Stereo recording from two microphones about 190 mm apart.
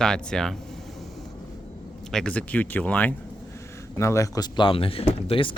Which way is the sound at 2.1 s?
5° left (ahead or behind).